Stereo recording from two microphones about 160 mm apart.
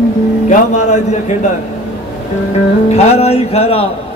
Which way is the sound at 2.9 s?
40° left (ahead or behind).